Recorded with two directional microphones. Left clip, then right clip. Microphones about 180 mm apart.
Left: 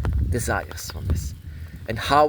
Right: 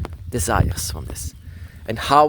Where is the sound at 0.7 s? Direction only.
40° right (ahead or behind).